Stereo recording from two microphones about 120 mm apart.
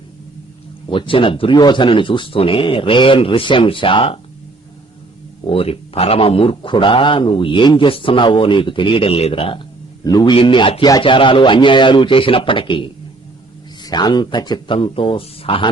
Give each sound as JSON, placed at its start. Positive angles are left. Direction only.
{"t": 0.9, "sound": "a man's voice", "side_deg": 45}
{"t": 5.5, "sound": "a man's voice", "side_deg": 50}
{"t": 10.0, "sound": "a man's voice", "side_deg": 35}
{"t": 13.8, "sound": "speech", "side_deg": 35}